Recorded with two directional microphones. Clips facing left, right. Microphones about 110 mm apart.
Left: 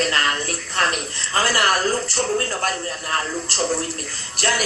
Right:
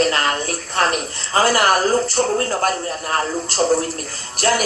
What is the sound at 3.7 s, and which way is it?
Speech, 45° right (ahead or behind).